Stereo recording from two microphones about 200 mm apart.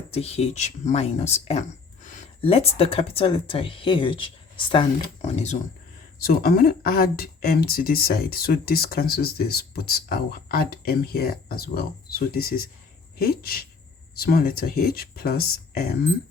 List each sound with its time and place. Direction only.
0.1 s speech: 30° left (ahead or behind)
6.1 s speech: 45° left (ahead or behind)